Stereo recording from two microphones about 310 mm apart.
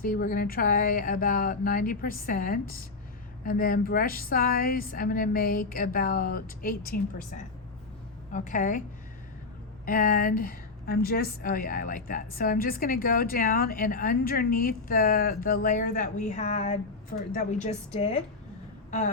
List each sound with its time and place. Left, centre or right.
0.0 s a woman's voice: left
8.3 s a woman's voice: left
9.8 s a woman's voice: left
17.9 s a woman's voice: centre
18.9 s a sound: left